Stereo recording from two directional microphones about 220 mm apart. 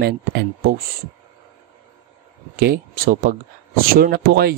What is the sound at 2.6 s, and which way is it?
Speech, 45° right (ahead or behind).